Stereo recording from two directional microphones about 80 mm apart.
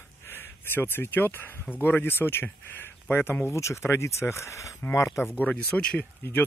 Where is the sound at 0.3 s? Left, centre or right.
Left.